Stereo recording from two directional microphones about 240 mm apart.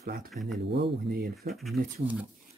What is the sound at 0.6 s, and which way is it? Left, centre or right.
Speech, right.